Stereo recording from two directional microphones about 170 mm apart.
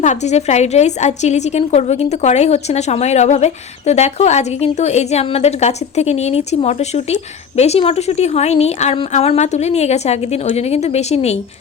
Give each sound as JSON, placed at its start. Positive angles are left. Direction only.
{"t": 0.0, "sound": "a woman's voice", "side_deg": 45}